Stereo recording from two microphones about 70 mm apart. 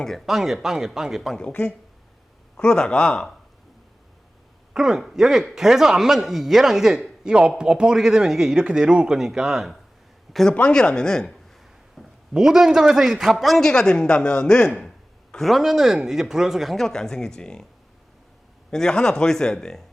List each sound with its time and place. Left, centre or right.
0.3 s a man's voice: centre
1.4 s speech: centre
4.7 s a man's voice: centre
10.5 s speech: centre
11.9 s a man's voice: centre
18.7 s speech: centre